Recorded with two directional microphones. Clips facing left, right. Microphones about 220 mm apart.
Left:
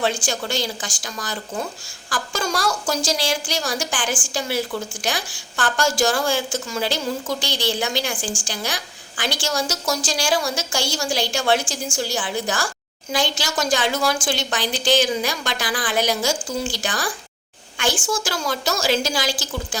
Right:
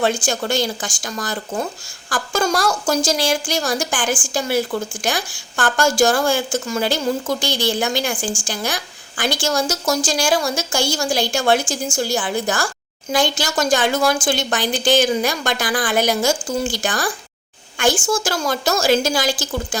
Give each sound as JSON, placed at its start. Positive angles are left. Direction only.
{"t": 0.0, "sound": "a woman's voice", "side_deg": -50}